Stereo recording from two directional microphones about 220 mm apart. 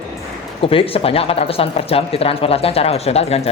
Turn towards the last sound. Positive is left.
turn(degrees=30)  # may be behind; listen again after turning